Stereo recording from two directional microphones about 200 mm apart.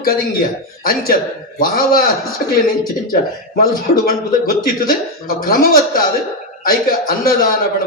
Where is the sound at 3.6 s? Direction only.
45° left (ahead or behind).